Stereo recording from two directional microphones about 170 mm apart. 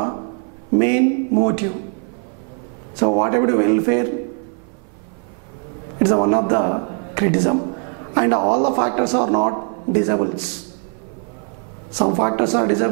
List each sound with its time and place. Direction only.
0.7 s a man's voice: 5° right (ahead or behind)
3.0 s a man's voice: 5° right (ahead or behind)
6.0 s a man's voice: 5° right (ahead or behind)
12.0 s a man's voice: 5° right (ahead or behind)